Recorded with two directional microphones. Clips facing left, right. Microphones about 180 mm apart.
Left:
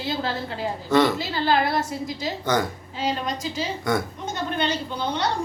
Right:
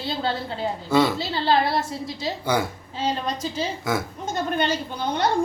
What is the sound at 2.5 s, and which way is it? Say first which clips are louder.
Speech: left 1 dB; 10° right (ahead or behind).